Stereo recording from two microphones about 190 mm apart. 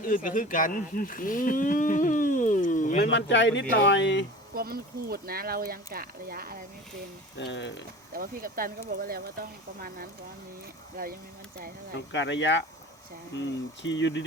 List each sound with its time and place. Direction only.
0.0 s speech: 45° left (ahead or behind)
3.1 s speech: 70° left (ahead or behind)
4.5 s speech: 50° right (ahead or behind)
7.3 s speech: 70° left (ahead or behind)
8.1 s speech: 50° right (ahead or behind)
11.9 s speech: 70° left (ahead or behind)
13.8 s speech: 70° left (ahead or behind)